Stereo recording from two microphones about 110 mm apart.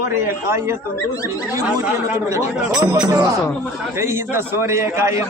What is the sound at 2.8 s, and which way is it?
A man's voice, 30° right (ahead or behind).